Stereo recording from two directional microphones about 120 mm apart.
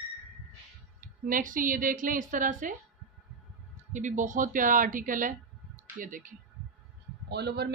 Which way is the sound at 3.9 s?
90° right.